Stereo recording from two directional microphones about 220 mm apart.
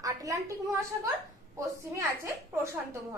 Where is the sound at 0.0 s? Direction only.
15° right (ahead or behind).